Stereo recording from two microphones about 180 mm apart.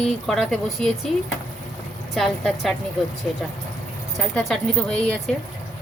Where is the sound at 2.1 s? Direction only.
Centre (ahead or behind).